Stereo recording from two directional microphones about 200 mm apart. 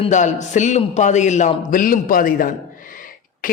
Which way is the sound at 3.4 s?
45° left (ahead or behind).